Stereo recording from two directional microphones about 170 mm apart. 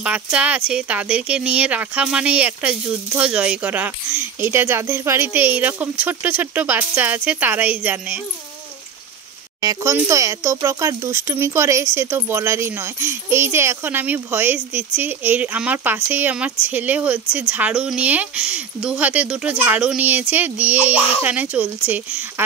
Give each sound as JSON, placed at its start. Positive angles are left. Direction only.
{"t": 0.0, "sound": "speech", "side_deg": -5}
{"t": 9.6, "sound": "speech", "side_deg": -20}